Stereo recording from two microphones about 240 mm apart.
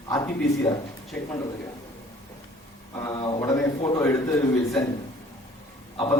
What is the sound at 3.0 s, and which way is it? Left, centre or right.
A man's voice, centre.